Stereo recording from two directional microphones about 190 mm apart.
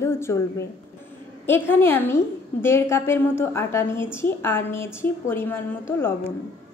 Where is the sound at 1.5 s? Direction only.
10° left (ahead or behind).